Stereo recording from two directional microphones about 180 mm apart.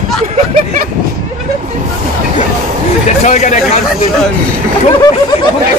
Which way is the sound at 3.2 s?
40° left (ahead or behind).